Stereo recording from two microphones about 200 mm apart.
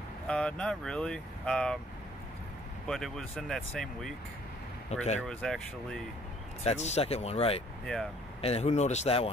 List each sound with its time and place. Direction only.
0.3 s speech: 5° left (ahead or behind)
2.9 s speech: centre (ahead or behind)
5.2 s speech: centre (ahead or behind)
6.6 s speech: 35° left (ahead or behind)
7.8 s speech: 5° left (ahead or behind)
8.4 s speech: 30° left (ahead or behind)